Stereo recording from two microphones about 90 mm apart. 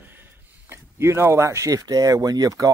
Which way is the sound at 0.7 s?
30° right (ahead or behind).